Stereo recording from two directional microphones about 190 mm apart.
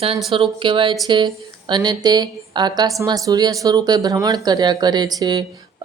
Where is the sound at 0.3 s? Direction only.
25° right (ahead or behind).